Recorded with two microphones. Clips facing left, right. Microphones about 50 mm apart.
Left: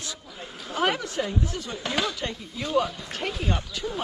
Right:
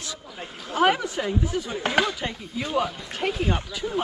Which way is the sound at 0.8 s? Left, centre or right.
Centre.